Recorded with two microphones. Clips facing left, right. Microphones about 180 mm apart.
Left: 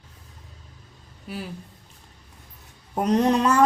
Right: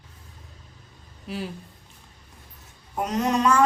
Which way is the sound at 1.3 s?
Centre (ahead or behind).